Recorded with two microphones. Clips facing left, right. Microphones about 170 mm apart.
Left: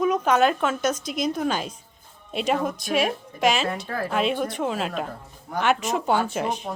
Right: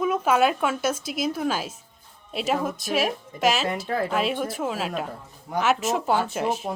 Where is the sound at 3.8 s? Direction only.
20° right (ahead or behind).